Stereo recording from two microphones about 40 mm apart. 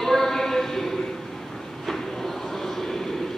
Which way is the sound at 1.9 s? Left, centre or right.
Centre.